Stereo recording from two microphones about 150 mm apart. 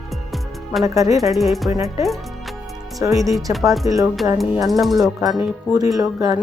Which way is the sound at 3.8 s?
45° left (ahead or behind).